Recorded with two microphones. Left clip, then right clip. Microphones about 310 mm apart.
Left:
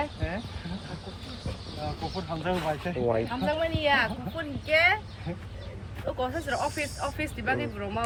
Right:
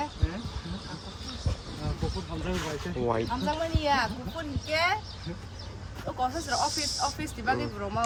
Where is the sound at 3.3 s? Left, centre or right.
Centre.